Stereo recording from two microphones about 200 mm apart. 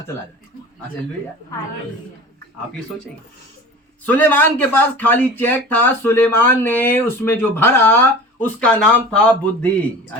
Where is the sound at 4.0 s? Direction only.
10° left (ahead or behind).